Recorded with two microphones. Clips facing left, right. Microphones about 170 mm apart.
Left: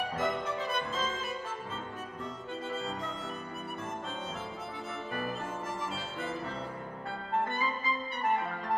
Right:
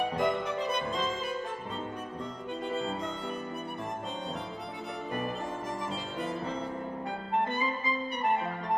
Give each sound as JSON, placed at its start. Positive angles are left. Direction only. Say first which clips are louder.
{"t": 0.2, "sound": "music", "louder": "right 3 dB", "side_deg": -20}
{"t": 6.1, "sound": "music", "louder": "right 4 dB", "side_deg": -20}